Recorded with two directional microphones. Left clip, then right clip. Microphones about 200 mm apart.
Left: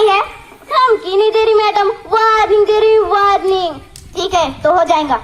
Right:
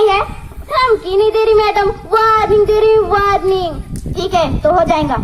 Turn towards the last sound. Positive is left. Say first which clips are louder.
# left 1 dB
turn(degrees=-50)  # may be behind; listen again after turning